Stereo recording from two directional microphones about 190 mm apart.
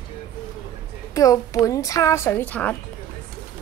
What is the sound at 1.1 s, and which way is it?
A child's voice, 15° left (ahead or behind).